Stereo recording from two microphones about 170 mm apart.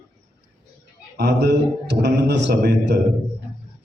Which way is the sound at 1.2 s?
85° right.